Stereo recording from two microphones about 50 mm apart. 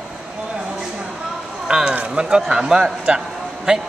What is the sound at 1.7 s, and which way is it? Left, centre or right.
A man's voice, centre.